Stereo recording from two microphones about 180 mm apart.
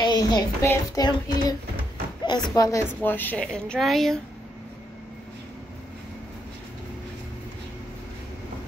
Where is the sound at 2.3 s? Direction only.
20° left (ahead or behind); by 4.2 s centre (ahead or behind).